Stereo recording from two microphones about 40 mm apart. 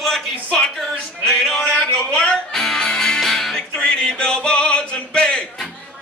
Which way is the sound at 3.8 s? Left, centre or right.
Left.